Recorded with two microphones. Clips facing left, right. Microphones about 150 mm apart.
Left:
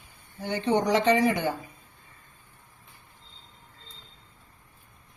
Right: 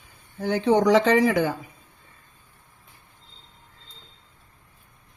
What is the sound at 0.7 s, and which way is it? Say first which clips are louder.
Speech: right 3 dB; 90° right.